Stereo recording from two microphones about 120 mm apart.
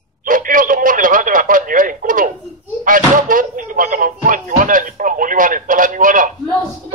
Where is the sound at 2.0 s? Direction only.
90° right.